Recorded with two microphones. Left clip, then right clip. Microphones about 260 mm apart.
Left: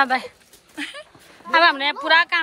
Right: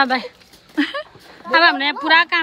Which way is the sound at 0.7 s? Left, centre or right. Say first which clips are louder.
Right 10 dB; right.